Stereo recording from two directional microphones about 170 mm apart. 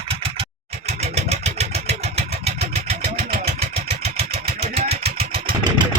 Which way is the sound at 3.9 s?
35° right (ahead or behind).